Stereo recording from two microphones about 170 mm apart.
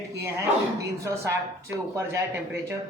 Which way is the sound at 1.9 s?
15° right (ahead or behind).